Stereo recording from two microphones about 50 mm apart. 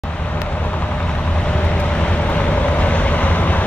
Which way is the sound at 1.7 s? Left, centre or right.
Left.